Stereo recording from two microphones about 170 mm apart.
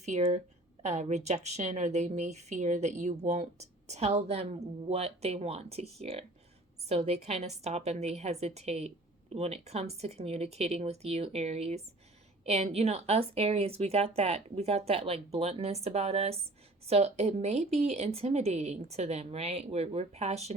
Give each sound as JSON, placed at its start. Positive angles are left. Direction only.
{"t": 0.0, "sound": "a woman's voice", "side_deg": -45}